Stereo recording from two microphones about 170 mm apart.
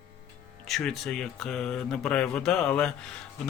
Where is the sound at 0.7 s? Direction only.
Centre (ahead or behind).